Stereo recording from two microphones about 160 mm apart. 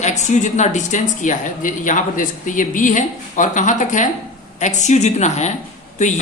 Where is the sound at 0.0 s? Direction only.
45° left (ahead or behind).